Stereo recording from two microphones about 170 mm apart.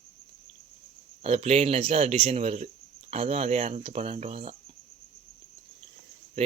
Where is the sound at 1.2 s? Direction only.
35° right (ahead or behind).